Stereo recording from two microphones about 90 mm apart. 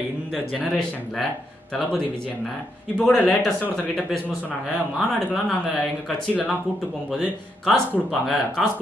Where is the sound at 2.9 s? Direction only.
15° left (ahead or behind).